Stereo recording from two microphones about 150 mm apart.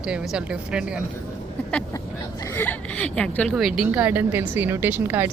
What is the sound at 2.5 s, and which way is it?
A woman's voice, 10° left (ahead or behind).